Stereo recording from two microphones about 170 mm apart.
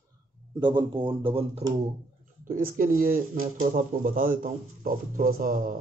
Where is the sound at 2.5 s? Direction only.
55° right (ahead or behind).